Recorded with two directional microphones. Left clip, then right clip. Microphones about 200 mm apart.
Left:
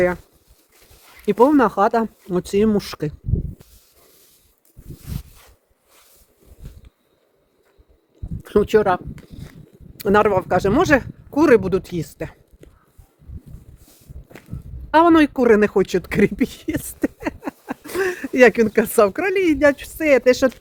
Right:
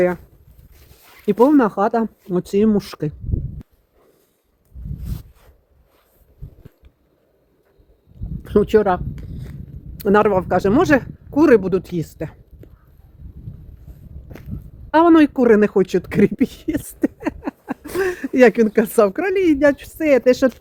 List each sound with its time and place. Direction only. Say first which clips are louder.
1.2 s speech: even; 15° left (ahead or behind)
5.1 s zipper: left 2 dB; 30° left (ahead or behind)
8.4 s walk: right 1 dB; 10° left (ahead or behind)
10.0 s speech: right 1 dB; 5° left (ahead or behind)
14.3 s walk: right 1 dB; centre (ahead or behind)
14.8 s speech: right 1 dB; 15° left (ahead or behind)